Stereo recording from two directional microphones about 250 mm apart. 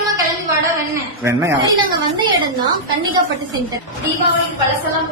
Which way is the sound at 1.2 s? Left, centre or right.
Centre.